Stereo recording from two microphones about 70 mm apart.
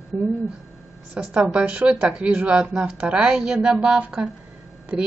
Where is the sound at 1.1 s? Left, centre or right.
Centre.